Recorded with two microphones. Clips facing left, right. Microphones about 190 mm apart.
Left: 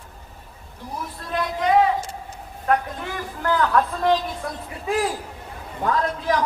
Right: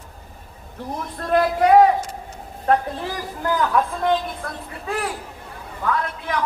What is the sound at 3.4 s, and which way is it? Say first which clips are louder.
Speech: even; 15° right (ahead or behind).